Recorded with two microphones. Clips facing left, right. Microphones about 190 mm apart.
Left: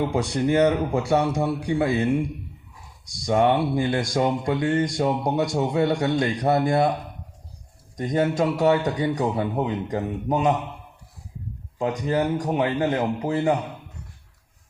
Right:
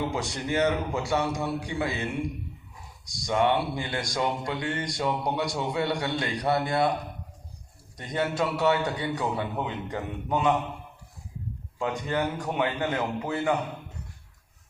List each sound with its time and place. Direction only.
0.1 s speech: 50° left (ahead or behind)
3.2 s speech: 45° left (ahead or behind)
7.9 s a man's voice: 45° left (ahead or behind)
11.8 s a man's voice: 35° left (ahead or behind)